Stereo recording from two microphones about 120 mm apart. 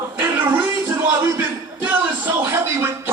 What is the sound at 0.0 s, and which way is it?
Music, 20° right (ahead or behind).